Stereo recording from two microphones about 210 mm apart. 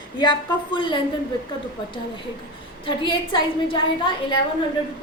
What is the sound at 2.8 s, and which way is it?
A woman's voice, 25° left (ahead or behind).